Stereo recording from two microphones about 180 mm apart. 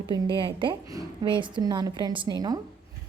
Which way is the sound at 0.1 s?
25° right (ahead or behind).